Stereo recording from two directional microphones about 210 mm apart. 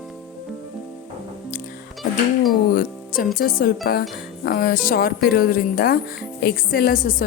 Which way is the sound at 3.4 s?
45° left (ahead or behind).